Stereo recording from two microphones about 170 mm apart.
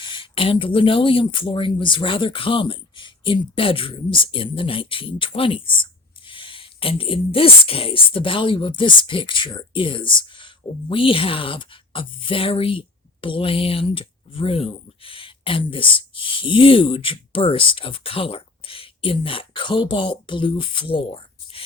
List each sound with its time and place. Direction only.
0.0 s speech: 30° left (ahead or behind)